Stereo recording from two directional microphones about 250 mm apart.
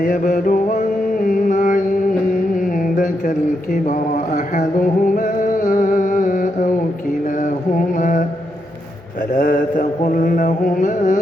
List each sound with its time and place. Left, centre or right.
0.0 s a sound: left
2.6 s mantra: left
9.3 s mantra: left